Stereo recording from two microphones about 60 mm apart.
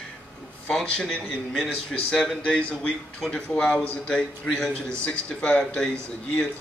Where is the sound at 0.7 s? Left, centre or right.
Centre.